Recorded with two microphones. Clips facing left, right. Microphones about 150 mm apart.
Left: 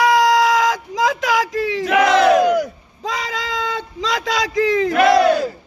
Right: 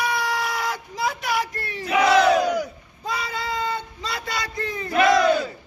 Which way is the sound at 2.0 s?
50° left (ahead or behind).